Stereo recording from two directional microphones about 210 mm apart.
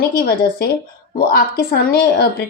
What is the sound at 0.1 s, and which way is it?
Speech, 45° left (ahead or behind).